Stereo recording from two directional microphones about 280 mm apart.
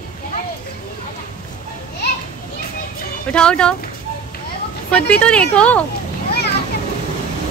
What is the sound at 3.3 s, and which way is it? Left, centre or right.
Speech, centre.